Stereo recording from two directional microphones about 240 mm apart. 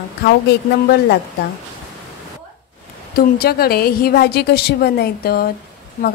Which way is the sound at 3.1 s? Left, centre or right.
Left.